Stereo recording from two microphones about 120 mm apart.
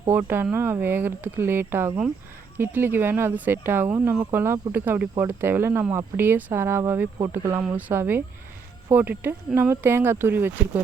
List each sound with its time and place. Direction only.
0.1 s speech: 20° right (ahead or behind)